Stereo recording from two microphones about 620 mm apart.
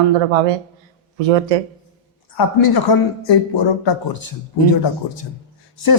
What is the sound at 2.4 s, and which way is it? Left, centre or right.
A woman's voice, left.